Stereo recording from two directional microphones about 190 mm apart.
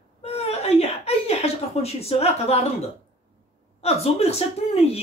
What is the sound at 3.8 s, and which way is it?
Speech, 30° left (ahead or behind).